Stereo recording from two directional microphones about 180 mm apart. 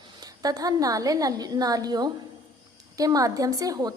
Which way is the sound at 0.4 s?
20° right (ahead or behind).